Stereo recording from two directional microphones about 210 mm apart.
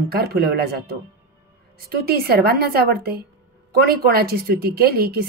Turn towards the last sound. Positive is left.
turn(degrees=-45)  # may be behind; listen again after turning